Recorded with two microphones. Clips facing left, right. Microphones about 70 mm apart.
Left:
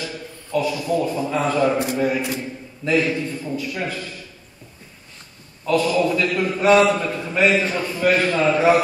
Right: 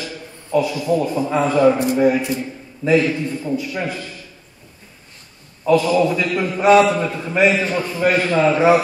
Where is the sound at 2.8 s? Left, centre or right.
Centre.